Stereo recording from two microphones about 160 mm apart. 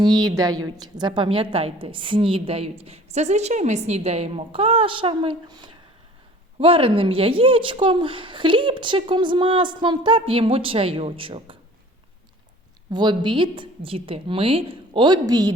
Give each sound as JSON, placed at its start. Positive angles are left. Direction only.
{"t": 0.0, "sound": "a woman's voice", "side_deg": -25}
{"t": 12.9, "sound": "a woman's voice", "side_deg": -30}